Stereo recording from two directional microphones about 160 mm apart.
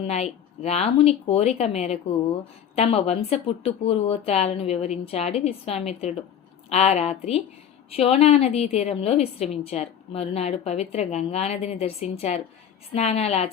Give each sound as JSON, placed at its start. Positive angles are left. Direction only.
{"t": 0.0, "sound": "a woman's voice", "side_deg": 40}